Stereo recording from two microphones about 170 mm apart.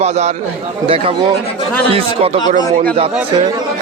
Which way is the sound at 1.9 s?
35° right (ahead or behind).